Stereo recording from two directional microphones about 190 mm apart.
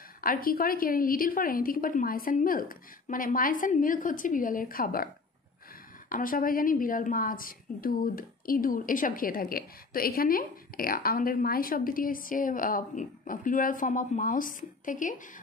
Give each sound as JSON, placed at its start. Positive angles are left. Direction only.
{"t": 0.2, "sound": "a woman's voice", "side_deg": 50}